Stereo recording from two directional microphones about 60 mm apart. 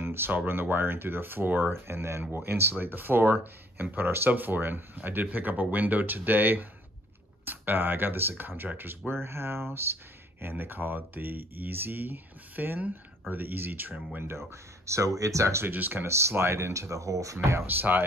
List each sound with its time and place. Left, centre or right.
0.0 s a sound: right
0.5 s speech: right
14.5 s speech: right
15.6 s speech: right
16.0 s speech: right
17.6 s speech: right